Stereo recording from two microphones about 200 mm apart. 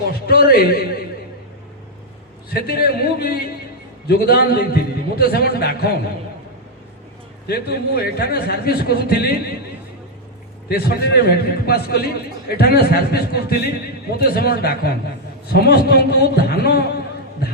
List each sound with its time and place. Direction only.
0.3 s a man's voice: 50° left (ahead or behind)
2.5 s a man's voice: 50° left (ahead or behind)
7.4 s a man's voice: 55° left (ahead or behind)
10.7 s a man's voice: 50° left (ahead or behind)